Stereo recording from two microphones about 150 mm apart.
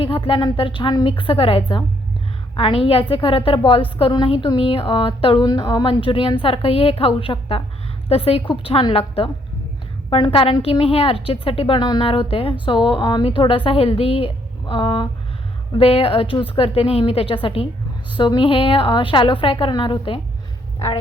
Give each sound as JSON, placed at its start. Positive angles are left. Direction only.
{"t": 0.0, "sound": "a woman's voice", "side_deg": 35}